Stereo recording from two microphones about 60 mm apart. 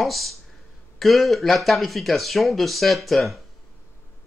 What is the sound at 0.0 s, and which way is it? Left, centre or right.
Speech, centre.